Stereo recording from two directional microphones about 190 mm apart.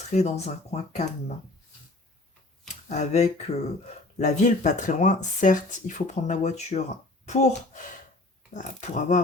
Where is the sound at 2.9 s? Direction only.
35° left (ahead or behind).